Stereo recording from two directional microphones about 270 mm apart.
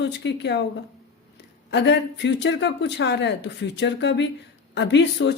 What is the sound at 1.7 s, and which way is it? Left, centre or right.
A woman's voice, left.